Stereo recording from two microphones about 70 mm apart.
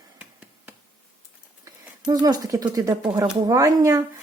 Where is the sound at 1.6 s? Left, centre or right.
Right.